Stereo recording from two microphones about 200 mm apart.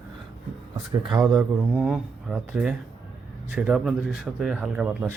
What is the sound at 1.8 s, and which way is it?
Speech, centre (ahead or behind).